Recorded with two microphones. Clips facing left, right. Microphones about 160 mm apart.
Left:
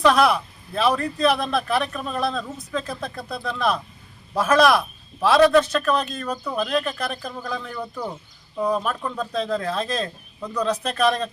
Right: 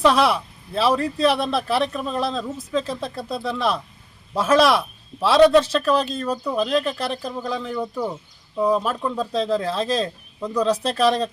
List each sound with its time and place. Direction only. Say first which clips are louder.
0.0 s speech: even; 30° right (ahead or behind)
6.3 s speech: right 2 dB; 10° right (ahead or behind)
6.6 s speech: right 2 dB; 25° right (ahead or behind)